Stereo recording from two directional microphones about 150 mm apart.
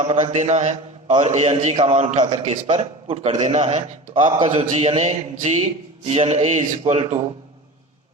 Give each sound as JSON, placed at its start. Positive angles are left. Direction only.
{"t": 0.0, "sound": "a man's voice", "side_deg": -45}
{"t": 4.4, "sound": "a man's voice", "side_deg": -50}